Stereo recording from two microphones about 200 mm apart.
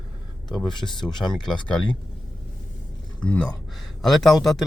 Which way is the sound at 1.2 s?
5° left (ahead or behind).